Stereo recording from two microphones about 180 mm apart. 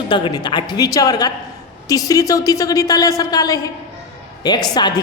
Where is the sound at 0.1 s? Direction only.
25° left (ahead or behind).